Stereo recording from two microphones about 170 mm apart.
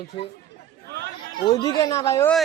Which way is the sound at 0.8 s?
90° right.